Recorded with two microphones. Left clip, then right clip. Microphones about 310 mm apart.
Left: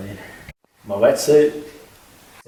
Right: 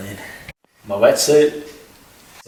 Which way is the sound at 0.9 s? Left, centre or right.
Centre.